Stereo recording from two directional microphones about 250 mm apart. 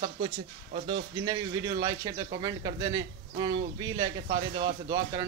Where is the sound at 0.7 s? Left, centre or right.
Right.